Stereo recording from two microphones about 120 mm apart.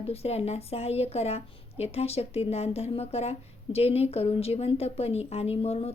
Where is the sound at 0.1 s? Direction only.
60° left (ahead or behind).